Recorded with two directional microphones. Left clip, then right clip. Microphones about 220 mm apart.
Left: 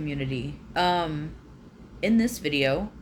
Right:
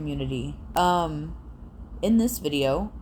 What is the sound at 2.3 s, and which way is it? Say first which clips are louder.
Speech: even; 30° right (ahead or behind).